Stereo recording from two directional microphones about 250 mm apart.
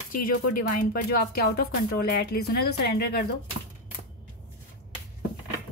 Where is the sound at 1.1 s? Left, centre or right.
Left.